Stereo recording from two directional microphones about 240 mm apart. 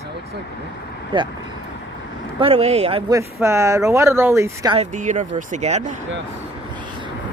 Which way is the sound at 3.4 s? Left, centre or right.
Centre.